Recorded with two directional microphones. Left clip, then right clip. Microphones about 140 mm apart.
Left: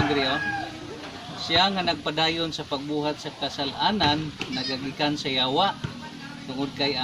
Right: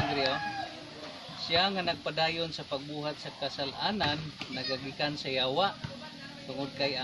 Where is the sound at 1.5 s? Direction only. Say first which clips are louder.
Left 6 dB; 20° right (ahead or behind).